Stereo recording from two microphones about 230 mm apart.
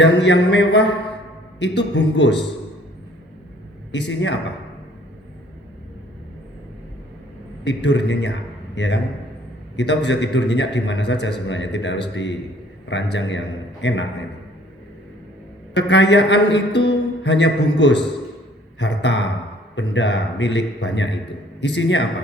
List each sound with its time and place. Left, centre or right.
0.0 s a man's voice: left
3.9 s a man's voice: left
7.6 s a man's voice: left
15.7 s a man's voice: left